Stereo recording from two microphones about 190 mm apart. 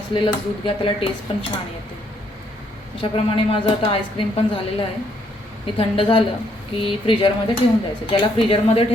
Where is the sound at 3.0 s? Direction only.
25° left (ahead or behind).